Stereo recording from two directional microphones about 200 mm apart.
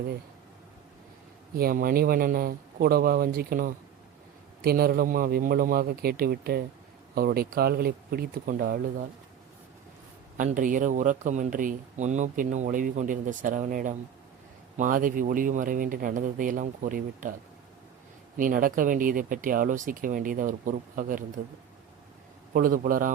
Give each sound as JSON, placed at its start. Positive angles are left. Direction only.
{"t": 1.5, "sound": "speech", "side_deg": -50}
{"t": 10.3, "sound": "speech", "side_deg": -40}
{"t": 18.3, "sound": "speech", "side_deg": -45}
{"t": 22.5, "sound": "speech", "side_deg": -45}